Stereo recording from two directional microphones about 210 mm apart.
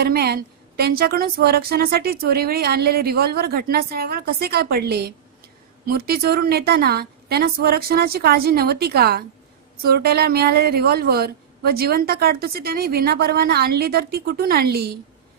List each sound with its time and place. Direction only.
0.0 s a woman's voice: 50° right (ahead or behind)